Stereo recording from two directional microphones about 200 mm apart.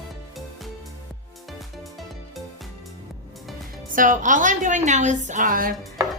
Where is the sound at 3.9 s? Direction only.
40° right (ahead or behind).